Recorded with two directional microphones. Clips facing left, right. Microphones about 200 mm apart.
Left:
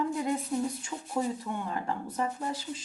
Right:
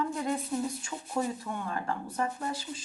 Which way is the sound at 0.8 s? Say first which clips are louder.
Left 1 dB; 15° left (ahead or behind).